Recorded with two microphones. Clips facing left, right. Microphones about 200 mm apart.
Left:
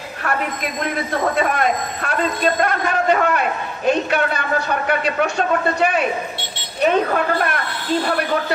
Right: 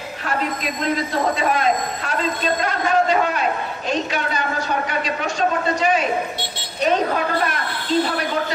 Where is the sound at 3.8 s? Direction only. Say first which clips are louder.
Left 6 dB; 60° left (ahead or behind).